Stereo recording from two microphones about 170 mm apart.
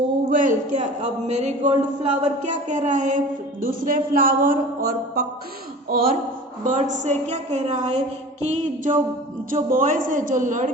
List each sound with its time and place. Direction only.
0.3 s speech: 45° right (ahead or behind)
6.7 s speech: 45° right (ahead or behind)